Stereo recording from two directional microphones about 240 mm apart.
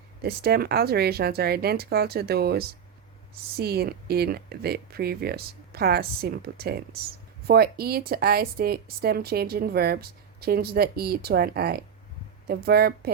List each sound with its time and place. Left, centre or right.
0.2 s a woman's voice: right